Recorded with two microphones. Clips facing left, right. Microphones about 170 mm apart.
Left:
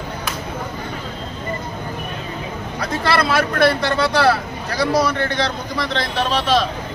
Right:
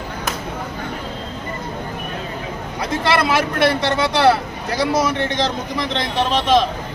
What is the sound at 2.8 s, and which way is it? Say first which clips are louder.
Speech: right 1 dB; 20° right (ahead or behind).